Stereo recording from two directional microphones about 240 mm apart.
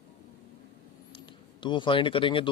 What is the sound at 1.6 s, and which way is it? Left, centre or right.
Speech, centre.